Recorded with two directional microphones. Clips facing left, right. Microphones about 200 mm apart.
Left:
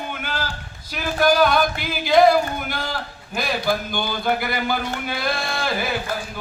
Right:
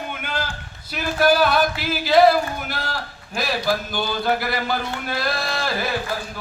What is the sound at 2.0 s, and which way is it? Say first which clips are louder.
A man's voice: even; 5° right (ahead or behind).